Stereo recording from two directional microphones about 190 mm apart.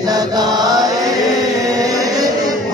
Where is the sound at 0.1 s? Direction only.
20° right (ahead or behind).